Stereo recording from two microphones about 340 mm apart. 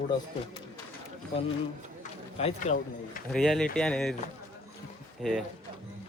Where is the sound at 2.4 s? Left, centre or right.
Centre.